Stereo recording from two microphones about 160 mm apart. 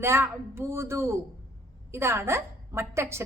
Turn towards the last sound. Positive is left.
turn(degrees=-15)  # may be behind; listen again after turning